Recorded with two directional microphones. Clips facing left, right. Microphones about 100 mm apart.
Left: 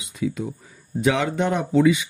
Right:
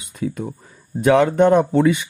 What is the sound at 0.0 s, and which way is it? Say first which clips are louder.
Speech: right 1 dB; 50° right (ahead or behind).